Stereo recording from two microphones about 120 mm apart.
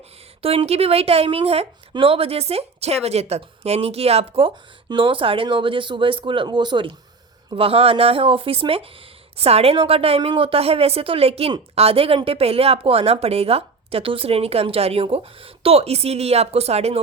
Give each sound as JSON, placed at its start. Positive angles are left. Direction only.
{"t": 0.4, "sound": "speech", "side_deg": -55}
{"t": 7.5, "sound": "speech", "side_deg": -50}